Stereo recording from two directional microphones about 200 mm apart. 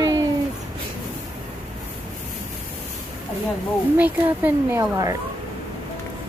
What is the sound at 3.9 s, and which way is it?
A woman's voice, 10° right (ahead or behind).